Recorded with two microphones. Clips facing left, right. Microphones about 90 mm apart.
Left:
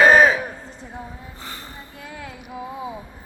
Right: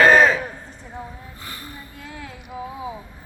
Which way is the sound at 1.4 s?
25° left (ahead or behind).